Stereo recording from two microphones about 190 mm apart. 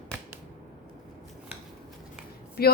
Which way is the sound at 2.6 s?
55° left (ahead or behind).